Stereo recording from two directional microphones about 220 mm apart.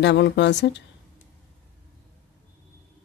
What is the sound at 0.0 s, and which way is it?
Speech, 55° left (ahead or behind).